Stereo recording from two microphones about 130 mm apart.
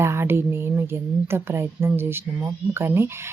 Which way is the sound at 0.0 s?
20° right (ahead or behind).